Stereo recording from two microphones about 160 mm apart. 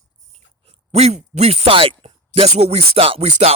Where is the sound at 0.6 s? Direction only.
40° right (ahead or behind).